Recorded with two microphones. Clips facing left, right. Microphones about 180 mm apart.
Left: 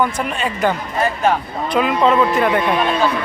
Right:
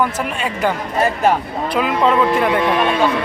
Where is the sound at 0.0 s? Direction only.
5° right (ahead or behind).